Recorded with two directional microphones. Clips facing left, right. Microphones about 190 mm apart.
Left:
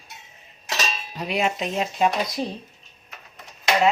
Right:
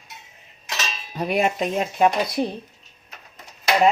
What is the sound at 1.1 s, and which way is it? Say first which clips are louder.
Speech: right 4 dB; 50° right (ahead or behind).